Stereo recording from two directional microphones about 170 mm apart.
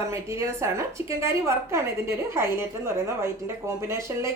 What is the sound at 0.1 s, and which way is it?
A woman's voice, 15° right (ahead or behind).